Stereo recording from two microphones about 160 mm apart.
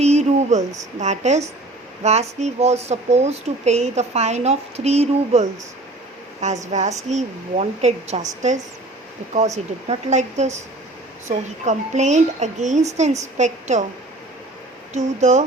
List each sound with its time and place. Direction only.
0.0 s a sound: 45° right (ahead or behind)
0.9 s speech: 50° right (ahead or behind)
9.9 s speech: 45° right (ahead or behind)
14.9 s speech: 45° right (ahead or behind)